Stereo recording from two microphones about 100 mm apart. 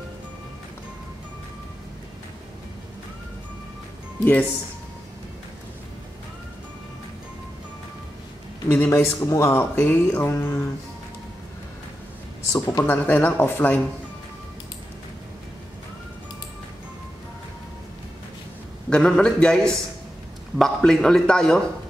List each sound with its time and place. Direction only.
4.2 s speech: 15° left (ahead or behind)
8.6 s speech: 20° left (ahead or behind)
12.5 s speech: 25° left (ahead or behind)
18.9 s speech: 10° left (ahead or behind)